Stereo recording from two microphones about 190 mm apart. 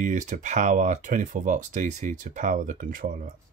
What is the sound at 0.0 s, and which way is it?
Speech, 40° right (ahead or behind).